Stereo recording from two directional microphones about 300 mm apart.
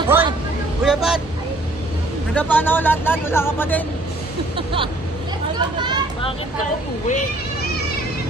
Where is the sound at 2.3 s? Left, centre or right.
Centre.